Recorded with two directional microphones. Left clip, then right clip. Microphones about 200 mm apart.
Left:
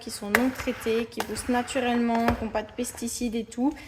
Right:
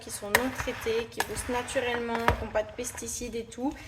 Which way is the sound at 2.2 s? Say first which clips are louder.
Left 1 dB; 35° left (ahead or behind).